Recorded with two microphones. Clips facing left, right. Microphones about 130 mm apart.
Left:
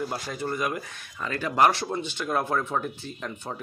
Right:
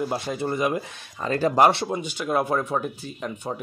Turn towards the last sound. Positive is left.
turn(degrees=-10)  # may be behind; listen again after turning